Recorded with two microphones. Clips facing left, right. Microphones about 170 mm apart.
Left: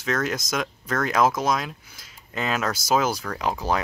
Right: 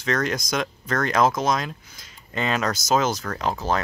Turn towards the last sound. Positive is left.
turn(degrees=10)  # may be behind; listen again after turning